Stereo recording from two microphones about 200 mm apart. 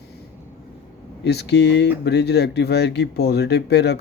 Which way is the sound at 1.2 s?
55° left (ahead or behind).